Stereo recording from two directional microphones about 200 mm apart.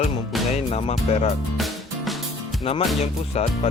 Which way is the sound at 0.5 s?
35° left (ahead or behind).